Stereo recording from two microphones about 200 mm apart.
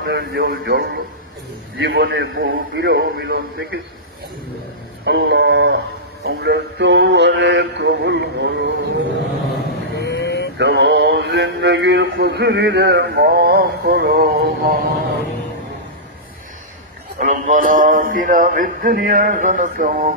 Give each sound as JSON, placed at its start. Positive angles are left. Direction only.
{"t": 0.0, "sound": "mantra", "side_deg": -60}
{"t": 5.0, "sound": "mantra", "side_deg": -55}
{"t": 9.9, "sound": "vehicle", "side_deg": 60}
{"t": 10.6, "sound": "mantra", "side_deg": -60}
{"t": 17.3, "sound": "a sound", "side_deg": -40}